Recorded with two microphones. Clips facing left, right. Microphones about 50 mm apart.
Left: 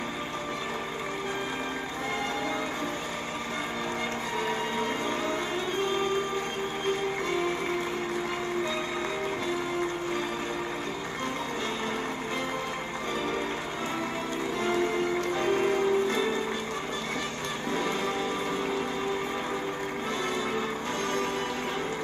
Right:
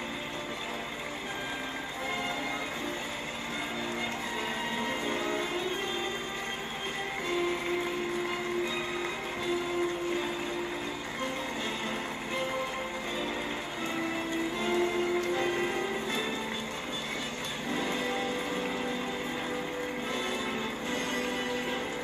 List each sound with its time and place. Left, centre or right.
14.6 s music: left
17.6 s music: left